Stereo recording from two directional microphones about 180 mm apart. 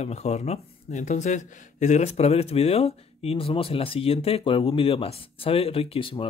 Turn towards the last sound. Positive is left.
turn(degrees=30)  # may be behind; listen again after turning